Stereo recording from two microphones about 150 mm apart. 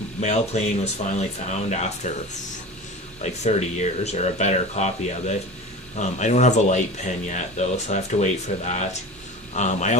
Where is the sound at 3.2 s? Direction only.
50° left (ahead or behind).